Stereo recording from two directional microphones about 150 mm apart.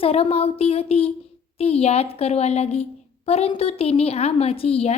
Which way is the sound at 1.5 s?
40° left (ahead or behind).